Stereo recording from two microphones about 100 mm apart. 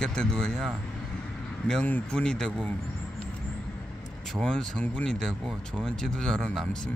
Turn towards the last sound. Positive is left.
turn(degrees=5)  # may be behind; listen again after turning